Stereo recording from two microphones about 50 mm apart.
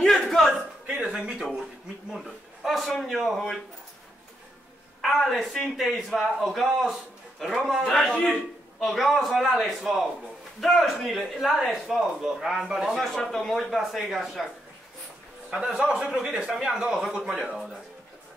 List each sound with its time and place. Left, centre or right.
0.0 s a sound: centre
0.8 s a sound: centre
2.1 s a man's voice: centre
5.0 s a man's voice: centre
7.9 s a man's voice: centre
8.7 s a man's voice: centre
13.0 s a man's voice: centre
16.1 s a man's voice: centre